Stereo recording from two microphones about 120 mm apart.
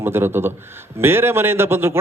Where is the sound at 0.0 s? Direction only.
20° right (ahead or behind).